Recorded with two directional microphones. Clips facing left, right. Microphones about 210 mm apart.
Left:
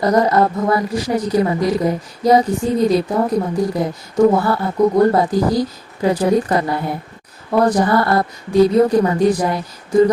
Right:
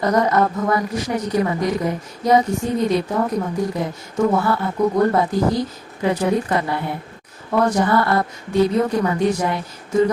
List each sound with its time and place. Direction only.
0.0 s a woman's voice: 35° left (ahead or behind)